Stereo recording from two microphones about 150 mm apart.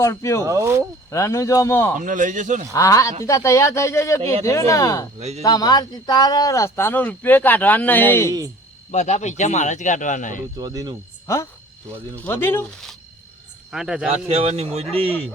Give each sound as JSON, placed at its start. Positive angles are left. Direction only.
{"t": 0.0, "sound": "speech", "side_deg": 20}
{"t": 0.4, "sound": "speech", "side_deg": -20}
{"t": 1.1, "sound": "speech", "side_deg": 20}
{"t": 2.0, "sound": "speech", "side_deg": -60}
{"t": 2.7, "sound": "speech", "side_deg": 20}
{"t": 8.9, "sound": "speech", "side_deg": 50}
{"t": 10.6, "sound": "speech", "side_deg": -25}
{"t": 12.1, "sound": "speech", "side_deg": 10}
{"t": 13.7, "sound": "speech", "side_deg": -5}
{"t": 14.1, "sound": "speech", "side_deg": -40}